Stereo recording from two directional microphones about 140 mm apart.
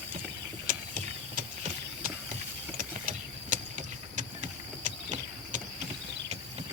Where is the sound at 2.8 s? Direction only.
65° right (ahead or behind).